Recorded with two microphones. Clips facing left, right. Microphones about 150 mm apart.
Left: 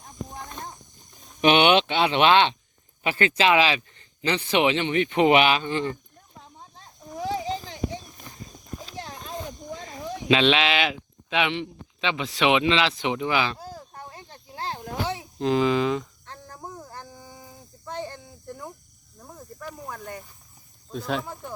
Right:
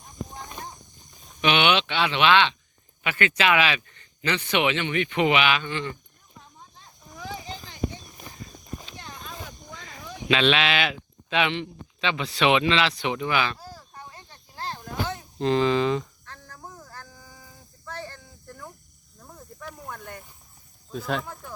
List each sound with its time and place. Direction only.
1.4 s a man's voice: 40° left (ahead or behind)
9.2 s a sound: 30° left (ahead or behind)
12.4 s speech: 15° left (ahead or behind)
15.1 s speech: 5° left (ahead or behind)
16.2 s a sound: 20° left (ahead or behind)
19.2 s cricket: 10° left (ahead or behind)
19.7 s snake: 5° left (ahead or behind)
20.9 s speech: centre (ahead or behind)